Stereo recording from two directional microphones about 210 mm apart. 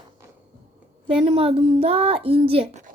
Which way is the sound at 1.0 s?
25° right (ahead or behind).